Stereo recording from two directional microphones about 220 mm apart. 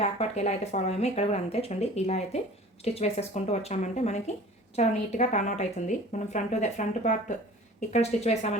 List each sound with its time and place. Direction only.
0.0 s speech: 30° left (ahead or behind)